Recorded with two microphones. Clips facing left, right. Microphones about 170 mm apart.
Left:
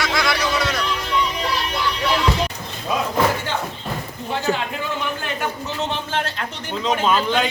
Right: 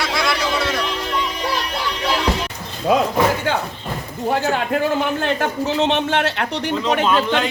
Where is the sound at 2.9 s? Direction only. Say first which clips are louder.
Right 7 dB; 80° right.